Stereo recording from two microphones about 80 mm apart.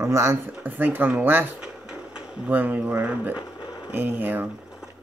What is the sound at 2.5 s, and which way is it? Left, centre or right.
Speech, centre.